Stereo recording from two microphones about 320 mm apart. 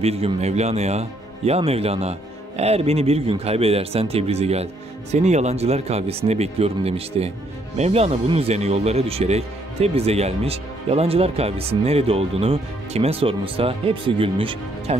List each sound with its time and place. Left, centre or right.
0.0 s speech: centre